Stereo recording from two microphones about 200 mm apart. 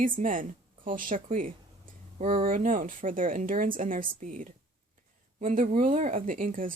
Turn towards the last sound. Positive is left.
turn(degrees=-45)  # may be behind; listen again after turning